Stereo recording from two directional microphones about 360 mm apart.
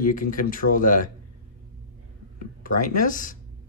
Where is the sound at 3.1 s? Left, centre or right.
Left.